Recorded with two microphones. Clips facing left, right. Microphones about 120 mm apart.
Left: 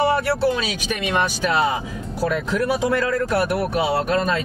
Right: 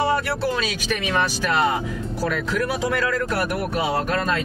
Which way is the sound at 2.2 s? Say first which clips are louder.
Left 3 dB; 25° left (ahead or behind).